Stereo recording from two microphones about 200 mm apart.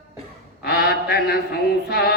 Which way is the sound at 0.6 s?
50° left (ahead or behind).